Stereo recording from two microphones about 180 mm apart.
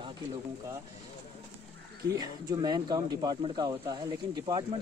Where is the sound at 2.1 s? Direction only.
20° right (ahead or behind).